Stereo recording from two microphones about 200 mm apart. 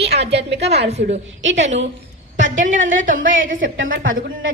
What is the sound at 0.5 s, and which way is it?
Speech, 60° right (ahead or behind).